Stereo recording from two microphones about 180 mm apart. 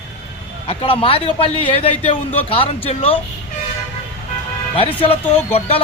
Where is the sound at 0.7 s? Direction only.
30° left (ahead or behind).